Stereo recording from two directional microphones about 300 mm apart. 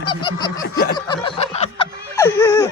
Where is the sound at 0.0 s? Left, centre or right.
Centre.